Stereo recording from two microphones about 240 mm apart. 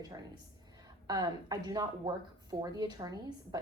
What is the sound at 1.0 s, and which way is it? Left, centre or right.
A woman's voice, centre.